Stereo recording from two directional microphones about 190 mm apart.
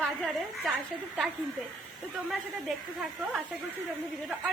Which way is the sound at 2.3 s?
Centre (ahead or behind).